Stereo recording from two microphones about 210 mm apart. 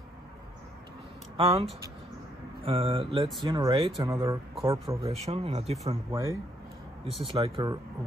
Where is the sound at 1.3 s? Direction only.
25° right (ahead or behind).